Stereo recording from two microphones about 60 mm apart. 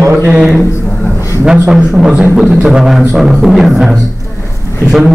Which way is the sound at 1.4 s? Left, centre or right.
Centre.